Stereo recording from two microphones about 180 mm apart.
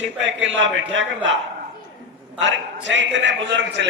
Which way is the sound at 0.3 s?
90° right.